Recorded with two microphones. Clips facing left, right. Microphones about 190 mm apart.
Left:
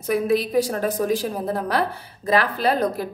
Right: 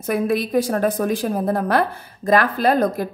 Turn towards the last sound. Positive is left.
turn(degrees=-50)  # may be behind; listen again after turning